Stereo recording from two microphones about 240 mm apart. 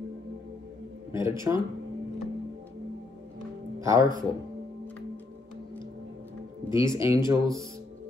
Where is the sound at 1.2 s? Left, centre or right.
Centre.